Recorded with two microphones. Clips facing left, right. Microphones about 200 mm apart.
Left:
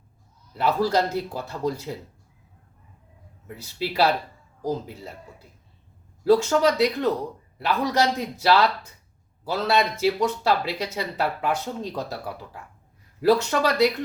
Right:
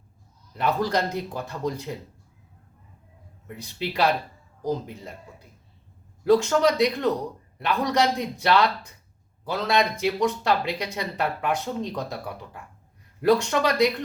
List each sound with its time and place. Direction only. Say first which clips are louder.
0.5 s speech: left 2 dB; 5° left (ahead or behind)
3.4 s speech: left 1 dB; 5° left (ahead or behind)
6.2 s speech: left 1 dB; 5° left (ahead or behind)
13.2 s speech: left 1 dB; 5° left (ahead or behind)